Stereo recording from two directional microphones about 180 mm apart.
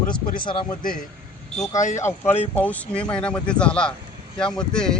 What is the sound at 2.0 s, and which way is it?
Speech, 15° left (ahead or behind).